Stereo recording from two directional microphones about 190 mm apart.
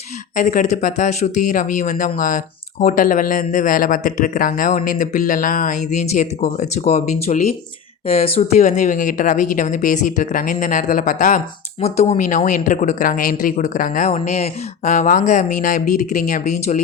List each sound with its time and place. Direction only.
0.3 s speech: 40° left (ahead or behind)